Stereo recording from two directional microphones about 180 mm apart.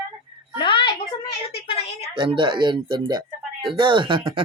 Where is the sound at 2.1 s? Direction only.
25° right (ahead or behind).